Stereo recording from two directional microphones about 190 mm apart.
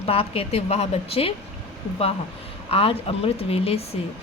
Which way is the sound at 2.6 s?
30° left (ahead or behind).